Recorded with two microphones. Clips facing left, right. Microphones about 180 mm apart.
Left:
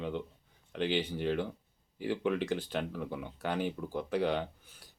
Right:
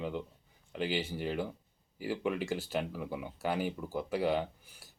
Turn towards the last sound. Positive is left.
turn(degrees=-5)  # may be behind; listen again after turning